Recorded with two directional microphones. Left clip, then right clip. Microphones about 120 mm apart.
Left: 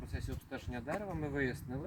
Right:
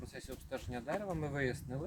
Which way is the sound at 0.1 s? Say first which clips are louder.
Right 2 dB; 35° right (ahead or behind).